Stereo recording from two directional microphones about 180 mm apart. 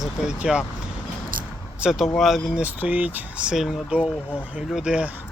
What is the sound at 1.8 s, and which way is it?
Speech, 5° right (ahead or behind).